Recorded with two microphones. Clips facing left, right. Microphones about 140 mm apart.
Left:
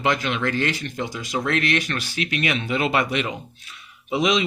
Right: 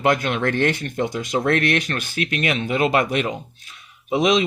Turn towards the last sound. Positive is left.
turn(degrees=-45)  # may be behind; listen again after turning